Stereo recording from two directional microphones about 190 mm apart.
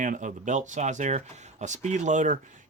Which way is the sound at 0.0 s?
40° right (ahead or behind).